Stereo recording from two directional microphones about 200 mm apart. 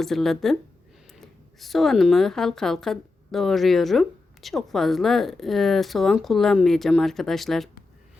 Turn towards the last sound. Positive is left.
turn(degrees=0)  # may be behind; listen again after turning